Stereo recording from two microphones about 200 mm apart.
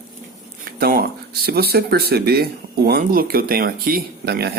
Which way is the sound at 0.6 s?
50° right (ahead or behind).